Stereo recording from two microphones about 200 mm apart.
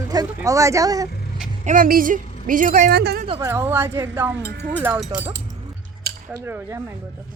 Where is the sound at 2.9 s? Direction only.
55° right (ahead or behind).